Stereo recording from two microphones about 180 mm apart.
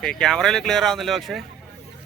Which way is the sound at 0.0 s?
5° left (ahead or behind).